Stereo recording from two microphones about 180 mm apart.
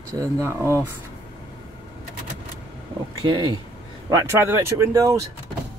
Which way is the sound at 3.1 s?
20° right (ahead or behind).